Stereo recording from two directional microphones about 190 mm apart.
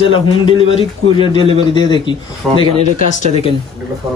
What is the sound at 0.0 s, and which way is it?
A man's voice, 25° left (ahead or behind).